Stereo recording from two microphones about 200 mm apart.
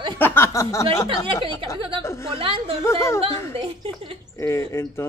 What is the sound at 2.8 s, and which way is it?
Speech, 15° left (ahead or behind).